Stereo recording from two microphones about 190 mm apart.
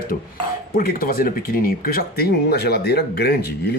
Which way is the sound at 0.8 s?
50° left (ahead or behind).